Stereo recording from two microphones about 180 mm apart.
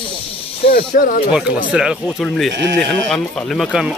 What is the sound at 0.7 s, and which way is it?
Speech, 55° left (ahead or behind).